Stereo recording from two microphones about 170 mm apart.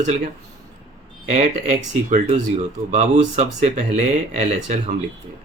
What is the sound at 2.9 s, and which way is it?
Speech, 45° right (ahead or behind).